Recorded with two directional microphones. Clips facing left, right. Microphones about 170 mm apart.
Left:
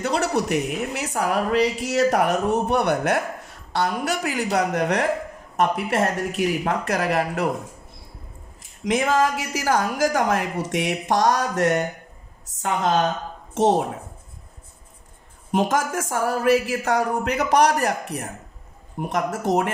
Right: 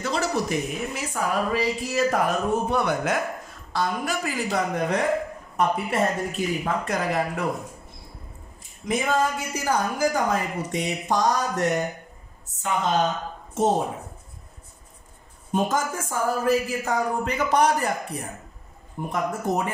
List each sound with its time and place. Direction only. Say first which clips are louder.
0.0 s a woman's voice: left 3 dB; 65° left (ahead or behind)
4.6 s a woman's voice: left 3 dB; 80° left
8.8 s a woman's voice: left 3 dB; 90° left
15.5 s a woman's voice: left 3 dB; 90° left; by 18.3 s 70° left (ahead or behind)
19.0 s speech: left 3 dB; 85° left